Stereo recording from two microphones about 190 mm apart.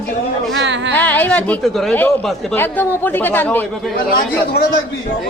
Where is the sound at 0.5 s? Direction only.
70° right (ahead or behind).